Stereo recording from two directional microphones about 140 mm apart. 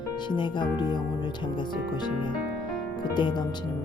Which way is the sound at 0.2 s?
35° left (ahead or behind).